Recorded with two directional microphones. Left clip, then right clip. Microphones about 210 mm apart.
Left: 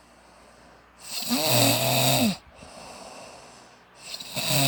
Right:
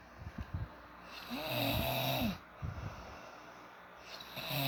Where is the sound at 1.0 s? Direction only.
60° left (ahead or behind).